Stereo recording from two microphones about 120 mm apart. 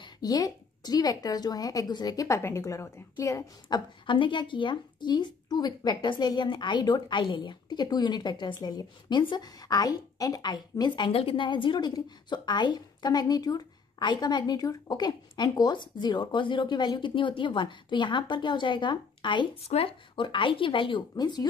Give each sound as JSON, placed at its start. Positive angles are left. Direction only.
{"t": 0.0, "sound": "a woman's voice", "side_deg": 30}
{"t": 3.6, "sound": "a woman's voice", "side_deg": 45}
{"t": 11.1, "sound": "a woman's voice", "side_deg": 50}
{"t": 19.6, "sound": "speech", "side_deg": 55}